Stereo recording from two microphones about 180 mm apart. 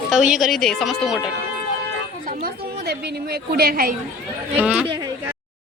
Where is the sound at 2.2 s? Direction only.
50° right (ahead or behind).